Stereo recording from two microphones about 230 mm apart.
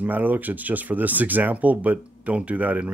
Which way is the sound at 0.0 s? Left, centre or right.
Centre.